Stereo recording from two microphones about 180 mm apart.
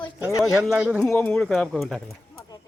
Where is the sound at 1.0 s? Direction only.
5° left (ahead or behind).